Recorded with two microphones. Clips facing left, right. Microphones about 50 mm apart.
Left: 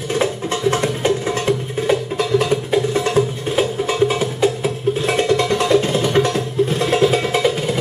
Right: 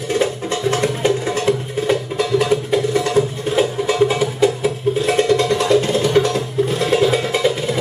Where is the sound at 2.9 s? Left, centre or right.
Left.